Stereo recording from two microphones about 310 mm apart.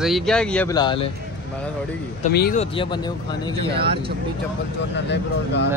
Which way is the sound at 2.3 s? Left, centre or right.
Left.